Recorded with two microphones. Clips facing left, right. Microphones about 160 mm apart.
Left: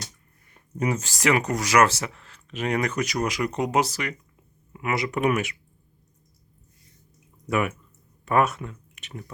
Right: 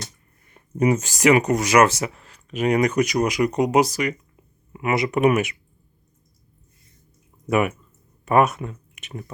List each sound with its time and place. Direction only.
0.5 s speech: 15° right (ahead or behind)
7.5 s speech: 20° right (ahead or behind)